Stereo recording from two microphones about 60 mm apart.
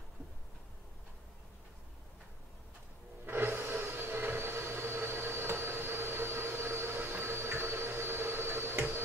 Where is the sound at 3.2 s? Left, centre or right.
Right.